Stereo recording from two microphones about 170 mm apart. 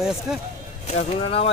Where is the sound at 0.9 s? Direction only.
35° left (ahead or behind).